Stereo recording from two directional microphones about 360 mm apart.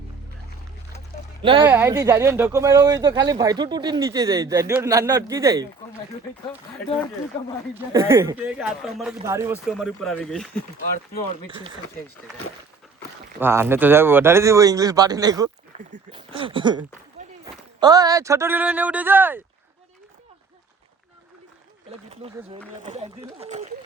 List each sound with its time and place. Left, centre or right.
1.4 s speech: centre
7.8 s speech: centre
11.4 s speech: centre
13.4 s speech: centre
22.8 s speech: centre